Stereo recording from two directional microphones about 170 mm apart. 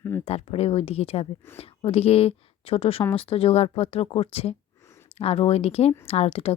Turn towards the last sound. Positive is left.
turn(degrees=35)  # may be behind; listen again after turning